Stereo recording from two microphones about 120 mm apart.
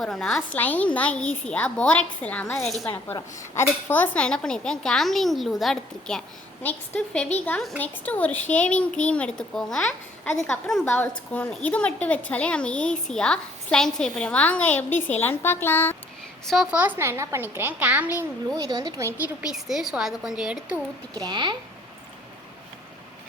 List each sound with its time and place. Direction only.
0.0 s speech: 5° left (ahead or behind)
0.5 s a woman's voice: 15° left (ahead or behind)
2.6 s speech: centre (ahead or behind)
2.8 s a woman's voice: 20° left (ahead or behind); by 10.8 s 5° left (ahead or behind)
10.8 s a woman's voice: 15° left (ahead or behind)
16.7 s a child's voice: 15° right (ahead or behind)
18.5 s speech: 30° right (ahead or behind)
19.1 s speech: 10° right (ahead or behind)
21.2 s speech: 40° right (ahead or behind)